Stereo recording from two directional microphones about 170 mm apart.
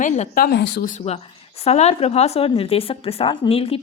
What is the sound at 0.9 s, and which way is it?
Speech, 40° left (ahead or behind).